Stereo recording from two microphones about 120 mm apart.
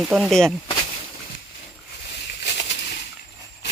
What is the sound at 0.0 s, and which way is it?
Speech, 5° right (ahead or behind).